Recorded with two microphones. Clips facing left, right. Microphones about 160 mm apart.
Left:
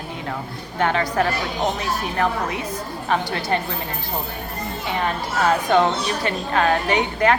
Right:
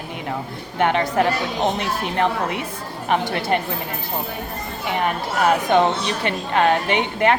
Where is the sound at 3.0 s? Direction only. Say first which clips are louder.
Right 2 dB; 20° right (ahead or behind).